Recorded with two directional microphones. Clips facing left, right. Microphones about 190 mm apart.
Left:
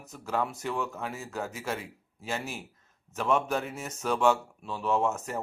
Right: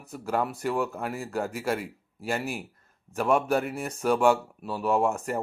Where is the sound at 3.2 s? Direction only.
10° right (ahead or behind).